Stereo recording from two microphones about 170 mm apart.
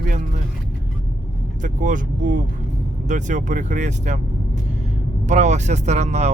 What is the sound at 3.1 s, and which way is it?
Speech, 45° right (ahead or behind).